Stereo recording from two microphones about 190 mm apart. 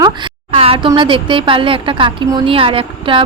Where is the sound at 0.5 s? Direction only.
30° right (ahead or behind).